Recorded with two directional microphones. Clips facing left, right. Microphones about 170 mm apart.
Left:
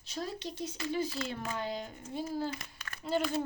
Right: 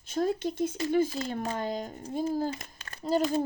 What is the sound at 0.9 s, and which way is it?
Speech, 50° right (ahead or behind).